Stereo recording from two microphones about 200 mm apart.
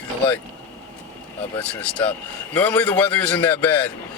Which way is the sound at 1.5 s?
5° left (ahead or behind).